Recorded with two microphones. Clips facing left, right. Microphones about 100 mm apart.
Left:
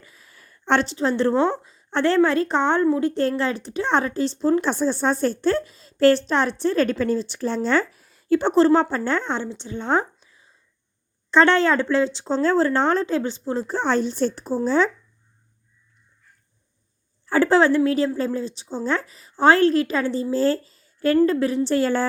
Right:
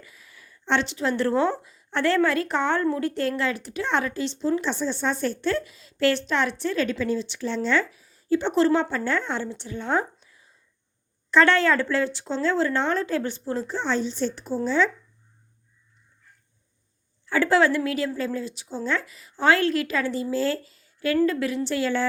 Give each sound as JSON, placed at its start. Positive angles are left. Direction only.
{"t": 0.0, "sound": "a sound", "side_deg": 35}
{"t": 0.9, "sound": "a woman's voice", "side_deg": 30}
{"t": 3.2, "sound": "speech", "side_deg": 35}
{"t": 8.0, "sound": "a sound", "side_deg": 60}
{"t": 8.4, "sound": "a woman's voice", "side_deg": 35}
{"t": 12.3, "sound": "speech", "side_deg": 40}
{"t": 13.1, "sound": "a woman's voice", "side_deg": 20}
{"t": 13.7, "sound": "speech", "side_deg": 50}
{"t": 17.2, "sound": "speech", "side_deg": 35}